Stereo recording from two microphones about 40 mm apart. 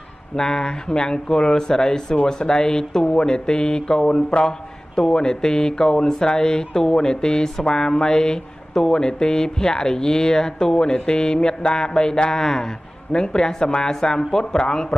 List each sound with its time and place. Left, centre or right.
0.4 s speech: centre